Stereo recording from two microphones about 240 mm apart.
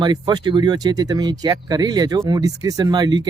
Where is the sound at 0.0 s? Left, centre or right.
Centre.